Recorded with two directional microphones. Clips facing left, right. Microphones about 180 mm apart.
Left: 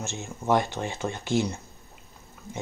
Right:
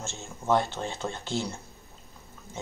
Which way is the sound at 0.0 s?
15° left (ahead or behind).